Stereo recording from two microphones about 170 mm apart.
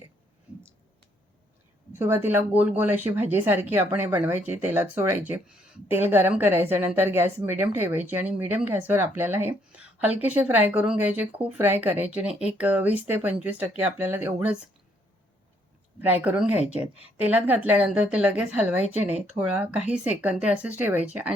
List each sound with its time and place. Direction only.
1.9 s speech: 15° right (ahead or behind)
16.0 s speech: 10° right (ahead or behind)
16.9 s a woman's voice: 35° left (ahead or behind)
17.2 s speech: 10° right (ahead or behind)